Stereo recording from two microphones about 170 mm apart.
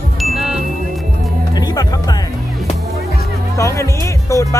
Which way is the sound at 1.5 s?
25° left (ahead or behind).